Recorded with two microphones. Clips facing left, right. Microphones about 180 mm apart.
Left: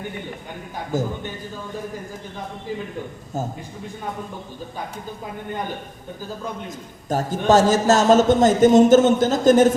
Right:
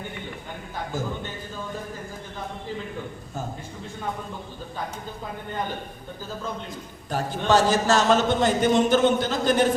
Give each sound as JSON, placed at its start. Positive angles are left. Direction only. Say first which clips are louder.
{"t": 0.9, "sound": "a man's voice", "louder": "left 7 dB", "side_deg": 40}
{"t": 7.1, "sound": "a man's voice", "louder": "left 4 dB", "side_deg": 45}